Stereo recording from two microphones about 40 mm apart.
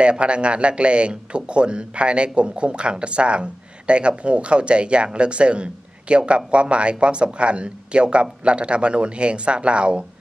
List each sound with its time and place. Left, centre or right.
0.0 s speech: right